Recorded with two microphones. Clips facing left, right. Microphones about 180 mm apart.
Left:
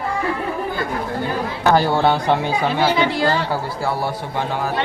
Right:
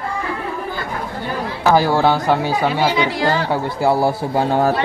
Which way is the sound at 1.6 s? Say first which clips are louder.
Right 2 dB; 5° right (ahead or behind).